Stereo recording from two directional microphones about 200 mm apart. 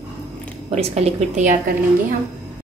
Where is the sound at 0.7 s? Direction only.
30° right (ahead or behind).